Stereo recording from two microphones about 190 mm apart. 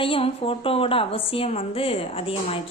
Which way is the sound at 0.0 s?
30° left (ahead or behind).